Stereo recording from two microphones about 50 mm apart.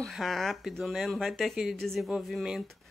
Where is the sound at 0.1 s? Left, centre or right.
Centre.